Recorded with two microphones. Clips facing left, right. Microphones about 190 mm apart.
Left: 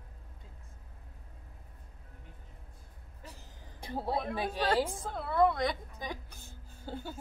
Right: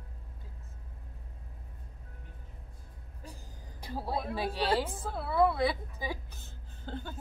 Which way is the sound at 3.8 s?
20° left (ahead or behind).